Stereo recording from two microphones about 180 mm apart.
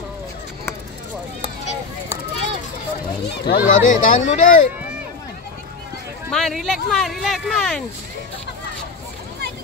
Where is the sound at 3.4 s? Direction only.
55° left (ahead or behind).